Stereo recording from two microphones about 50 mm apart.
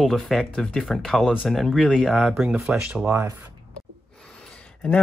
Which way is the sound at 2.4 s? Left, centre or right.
Centre.